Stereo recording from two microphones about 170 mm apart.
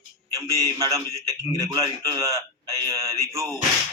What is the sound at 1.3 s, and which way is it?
A man's voice, 20° right (ahead or behind).